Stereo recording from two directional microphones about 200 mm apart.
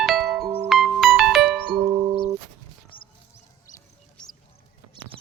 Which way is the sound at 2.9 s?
25° left (ahead or behind).